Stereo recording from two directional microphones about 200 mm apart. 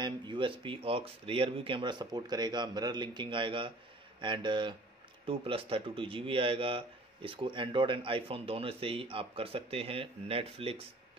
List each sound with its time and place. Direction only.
0.0 s a man's voice: 25° right (ahead or behind)